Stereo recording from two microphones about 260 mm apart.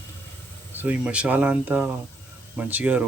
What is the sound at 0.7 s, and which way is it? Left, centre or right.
Speech, centre.